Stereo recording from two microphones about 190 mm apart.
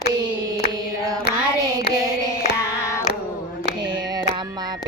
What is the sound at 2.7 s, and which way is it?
Carnatic music, 15° left (ahead or behind).